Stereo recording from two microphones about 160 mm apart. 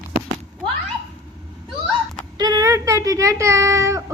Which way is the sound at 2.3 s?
25° right (ahead or behind).